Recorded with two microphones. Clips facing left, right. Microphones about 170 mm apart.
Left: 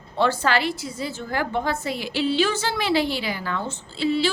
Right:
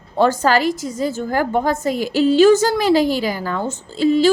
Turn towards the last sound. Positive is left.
turn(degrees=-45)  # may be behind; listen again after turning